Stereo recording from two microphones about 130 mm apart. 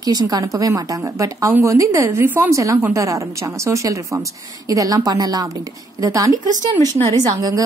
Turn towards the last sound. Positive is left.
turn(degrees=-30)  # may be behind; listen again after turning